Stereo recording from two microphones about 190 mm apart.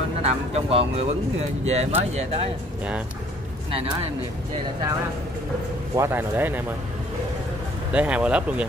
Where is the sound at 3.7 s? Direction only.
30° right (ahead or behind).